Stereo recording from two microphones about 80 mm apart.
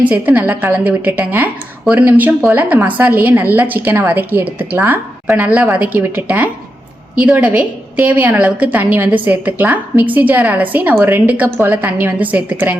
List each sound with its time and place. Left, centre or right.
0.0 s a woman's voice: centre